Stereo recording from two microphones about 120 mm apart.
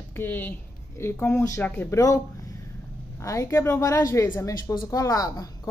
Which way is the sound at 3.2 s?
25° left (ahead or behind).